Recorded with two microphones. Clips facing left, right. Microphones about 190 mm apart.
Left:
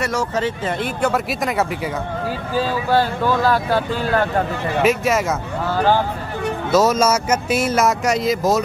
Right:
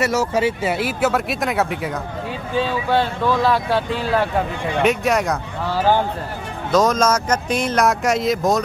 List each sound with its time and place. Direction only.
0.0 s speech: 5° right (ahead or behind)
6.7 s speech: 5° left (ahead or behind)